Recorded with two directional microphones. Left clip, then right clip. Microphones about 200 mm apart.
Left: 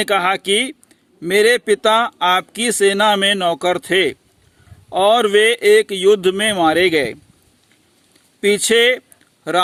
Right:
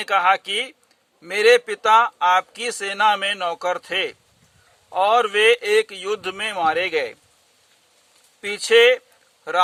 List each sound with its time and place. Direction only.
0.0 s speech: 45° left (ahead or behind)
8.4 s speech: 45° left (ahead or behind)